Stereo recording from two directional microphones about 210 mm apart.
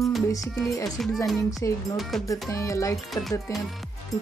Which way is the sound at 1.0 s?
Centre (ahead or behind).